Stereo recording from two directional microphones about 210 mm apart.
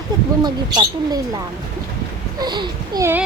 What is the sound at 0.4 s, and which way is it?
Speech, 20° right (ahead or behind).